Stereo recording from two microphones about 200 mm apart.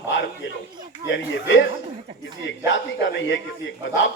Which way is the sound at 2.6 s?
65° left (ahead or behind).